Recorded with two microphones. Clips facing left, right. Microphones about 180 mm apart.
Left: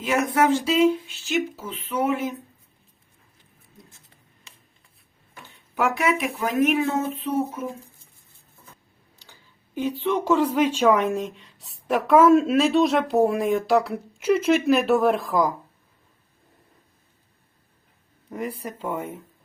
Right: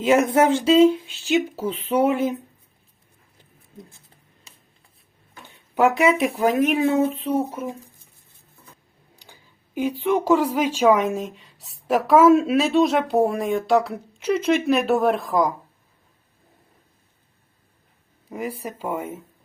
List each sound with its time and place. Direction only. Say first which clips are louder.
0.0 s speech: right 4 dB; 25° right (ahead or behind)
5.7 s speech: right 5 dB; 20° right (ahead or behind)
6.5 s speech: left 3 dB; 35° right (ahead or behind)
9.1 s a sound: right 3 dB; 15° right (ahead or behind)
10.0 s speech: right 2 dB; 10° right (ahead or behind)
18.3 s speech: right 1 dB; 5° right (ahead or behind)